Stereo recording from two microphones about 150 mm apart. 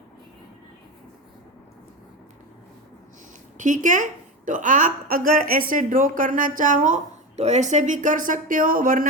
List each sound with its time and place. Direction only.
3.6 s a woman's voice: 55° right (ahead or behind)